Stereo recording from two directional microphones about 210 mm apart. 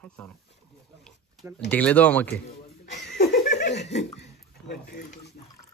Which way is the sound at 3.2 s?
35° left (ahead or behind).